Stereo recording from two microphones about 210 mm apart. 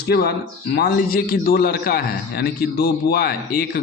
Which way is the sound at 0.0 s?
50° left (ahead or behind).